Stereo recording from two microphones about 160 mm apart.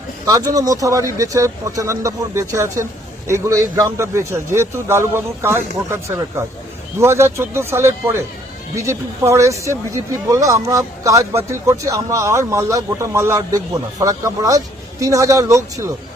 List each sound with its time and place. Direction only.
0.3 s a man's voice: 20° right (ahead or behind)